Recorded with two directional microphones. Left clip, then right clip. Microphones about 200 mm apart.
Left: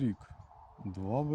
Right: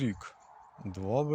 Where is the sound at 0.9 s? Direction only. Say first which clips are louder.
Right 4 dB; 20° right (ahead or behind).